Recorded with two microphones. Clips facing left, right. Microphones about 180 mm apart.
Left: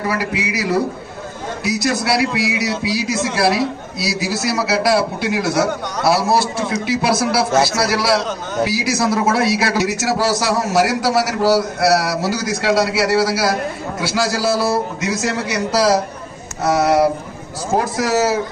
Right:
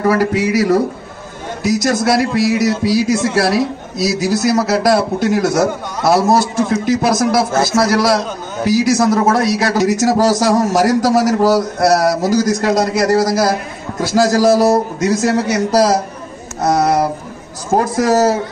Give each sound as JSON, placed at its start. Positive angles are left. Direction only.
{"t": 0.0, "sound": "a man's voice", "side_deg": -45}